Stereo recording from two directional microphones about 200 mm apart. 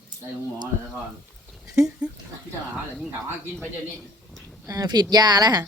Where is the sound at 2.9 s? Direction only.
Centre (ahead or behind).